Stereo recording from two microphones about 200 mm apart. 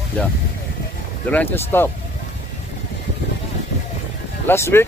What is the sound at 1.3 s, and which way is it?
Speech, 10° left (ahead or behind).